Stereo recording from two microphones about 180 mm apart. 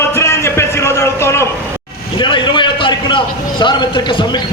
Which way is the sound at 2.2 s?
25° left (ahead or behind).